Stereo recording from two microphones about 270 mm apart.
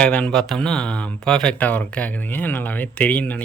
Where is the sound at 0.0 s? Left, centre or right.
Centre.